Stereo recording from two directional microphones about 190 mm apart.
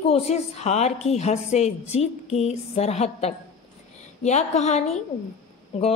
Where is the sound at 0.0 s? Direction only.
30° left (ahead or behind).